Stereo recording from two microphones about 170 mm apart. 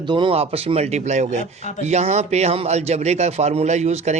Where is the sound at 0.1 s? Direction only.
30° right (ahead or behind).